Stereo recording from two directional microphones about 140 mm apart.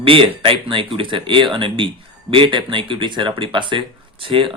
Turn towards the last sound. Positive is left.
turn(degrees=-40)  # may be behind; listen again after turning